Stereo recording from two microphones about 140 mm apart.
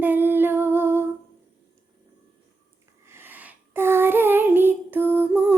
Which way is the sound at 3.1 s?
15° right (ahead or behind).